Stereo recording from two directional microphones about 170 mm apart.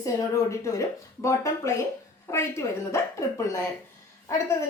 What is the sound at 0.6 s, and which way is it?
A woman's voice, 20° left (ahead or behind).